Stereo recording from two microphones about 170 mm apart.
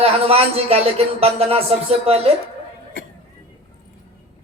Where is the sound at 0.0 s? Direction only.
35° right (ahead or behind).